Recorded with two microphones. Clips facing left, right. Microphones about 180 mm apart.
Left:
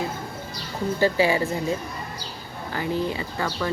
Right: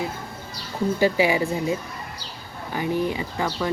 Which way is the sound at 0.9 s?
15° right (ahead or behind).